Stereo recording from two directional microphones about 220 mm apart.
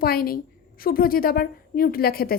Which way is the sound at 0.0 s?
40° left (ahead or behind).